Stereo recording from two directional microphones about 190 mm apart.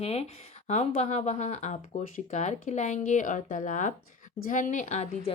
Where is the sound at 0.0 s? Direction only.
30° left (ahead or behind).